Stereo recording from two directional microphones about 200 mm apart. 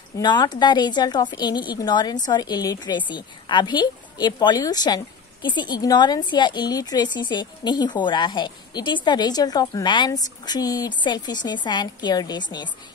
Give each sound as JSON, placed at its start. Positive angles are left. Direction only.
{"t": 0.2, "sound": "a woman's voice", "side_deg": 20}